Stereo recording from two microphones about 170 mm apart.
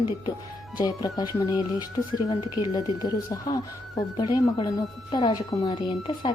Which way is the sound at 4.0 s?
25° left (ahead or behind).